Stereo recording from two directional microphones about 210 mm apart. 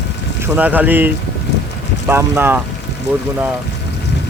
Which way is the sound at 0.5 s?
5° right (ahead or behind).